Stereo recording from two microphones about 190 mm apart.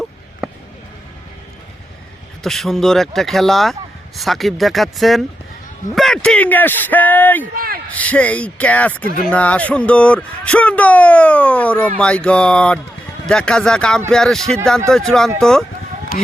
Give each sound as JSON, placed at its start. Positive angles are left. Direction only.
{"t": 2.4, "sound": "speech", "side_deg": 0}
{"t": 7.5, "sound": "a man's voice", "side_deg": -50}
{"t": 7.9, "sound": "speech", "side_deg": 10}
{"t": 16.1, "sound": "speech", "side_deg": 50}